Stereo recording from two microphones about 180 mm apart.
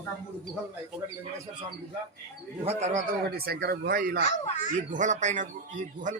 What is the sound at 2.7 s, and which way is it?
Speech, 40° right (ahead or behind).